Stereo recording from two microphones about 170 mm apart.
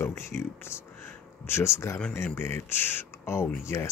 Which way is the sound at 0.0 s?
15° left (ahead or behind).